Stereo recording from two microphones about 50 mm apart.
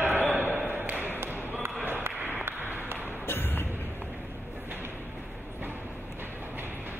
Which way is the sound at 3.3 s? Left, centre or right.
Left.